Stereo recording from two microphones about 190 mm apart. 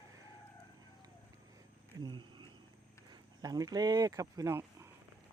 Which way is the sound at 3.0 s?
20° right (ahead or behind).